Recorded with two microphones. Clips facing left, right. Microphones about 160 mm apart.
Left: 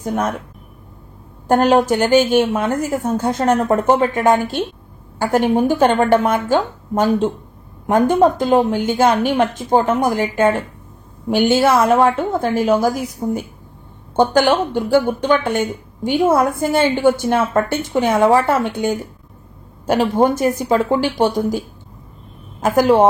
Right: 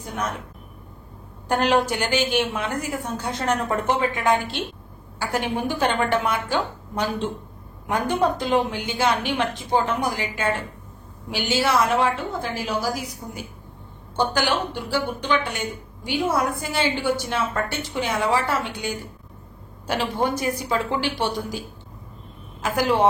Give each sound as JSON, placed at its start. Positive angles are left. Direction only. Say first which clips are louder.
{"t": 0.0, "sound": "speech", "louder": "left 8 dB", "side_deg": 50}
{"t": 1.5, "sound": "speech", "louder": "left 7 dB", "side_deg": 45}